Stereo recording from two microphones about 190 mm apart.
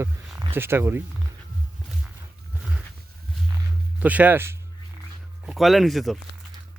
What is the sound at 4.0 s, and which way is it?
Speech, 10° right (ahead or behind).